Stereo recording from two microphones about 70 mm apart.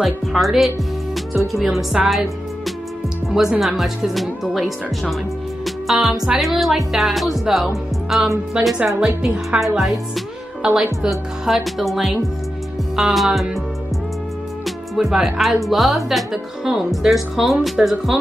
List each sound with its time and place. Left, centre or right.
0.0 s speech: centre
3.3 s speech: centre
5.9 s speech: centre
15.0 s speech: centre